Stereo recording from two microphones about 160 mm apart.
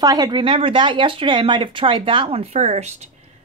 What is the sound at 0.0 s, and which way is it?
Speech, 25° right (ahead or behind).